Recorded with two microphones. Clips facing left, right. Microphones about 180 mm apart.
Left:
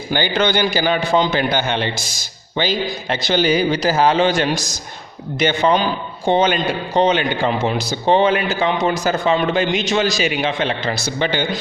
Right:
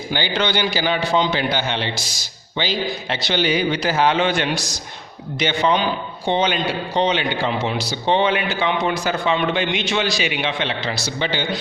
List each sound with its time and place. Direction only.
0.1 s a man's voice: 50° left (ahead or behind)